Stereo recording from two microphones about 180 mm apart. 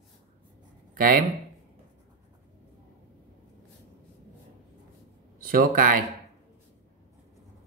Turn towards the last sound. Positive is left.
turn(degrees=-50)  # may be behind; listen again after turning